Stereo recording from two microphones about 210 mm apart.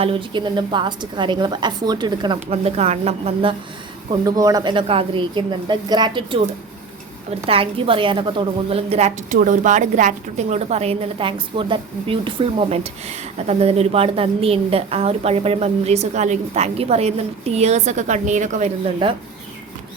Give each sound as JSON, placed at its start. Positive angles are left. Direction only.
{"t": 0.0, "sound": "a woman's voice", "side_deg": -25}
{"t": 4.1, "sound": "a woman's voice", "side_deg": -15}
{"t": 7.4, "sound": "a woman's voice", "side_deg": -25}